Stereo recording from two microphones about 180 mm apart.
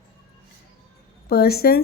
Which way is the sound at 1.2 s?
60° left (ahead or behind).